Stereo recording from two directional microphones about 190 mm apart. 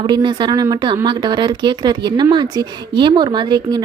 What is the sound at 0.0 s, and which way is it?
A woman's voice, 25° right (ahead or behind).